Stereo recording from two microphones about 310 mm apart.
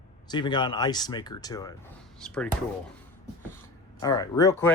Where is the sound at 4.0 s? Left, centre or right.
Centre.